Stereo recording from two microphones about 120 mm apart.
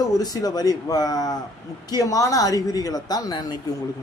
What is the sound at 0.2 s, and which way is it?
Speech, 30° left (ahead or behind).